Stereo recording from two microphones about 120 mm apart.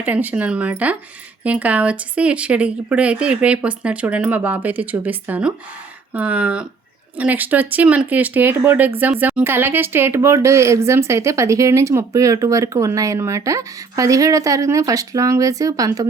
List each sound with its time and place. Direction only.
0.0 s a woman's voice: 15° right (ahead or behind); by 15.9 s 30° right (ahead or behind)